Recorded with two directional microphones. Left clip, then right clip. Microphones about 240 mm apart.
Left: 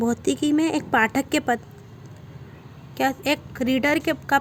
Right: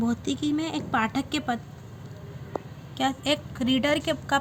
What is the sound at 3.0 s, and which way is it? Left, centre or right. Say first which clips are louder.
A woman's voice: left 3 dB; centre.